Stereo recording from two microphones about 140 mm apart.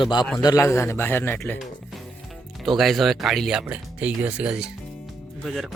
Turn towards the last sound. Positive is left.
turn(degrees=0)  # may be behind; listen again after turning